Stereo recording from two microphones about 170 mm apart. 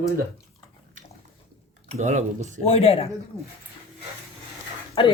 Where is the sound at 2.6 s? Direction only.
35° left (ahead or behind).